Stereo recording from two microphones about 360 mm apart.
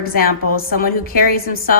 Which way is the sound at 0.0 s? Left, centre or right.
Left.